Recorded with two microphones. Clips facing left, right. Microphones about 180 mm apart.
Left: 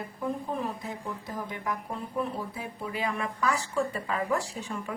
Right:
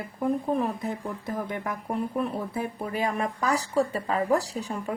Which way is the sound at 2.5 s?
50° right (ahead or behind).